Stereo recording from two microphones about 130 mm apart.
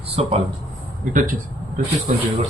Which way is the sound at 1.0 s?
90° right.